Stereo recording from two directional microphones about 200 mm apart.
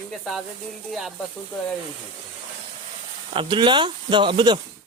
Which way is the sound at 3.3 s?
25° right (ahead or behind).